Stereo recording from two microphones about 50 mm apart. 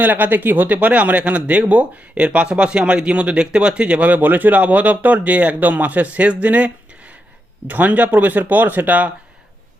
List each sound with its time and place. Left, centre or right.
0.0 s speech: right